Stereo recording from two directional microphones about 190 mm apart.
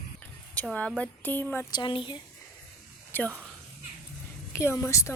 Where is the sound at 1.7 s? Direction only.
25° left (ahead or behind).